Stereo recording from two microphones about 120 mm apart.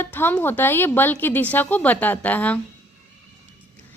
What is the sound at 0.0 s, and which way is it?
A woman's voice, 20° left (ahead or behind).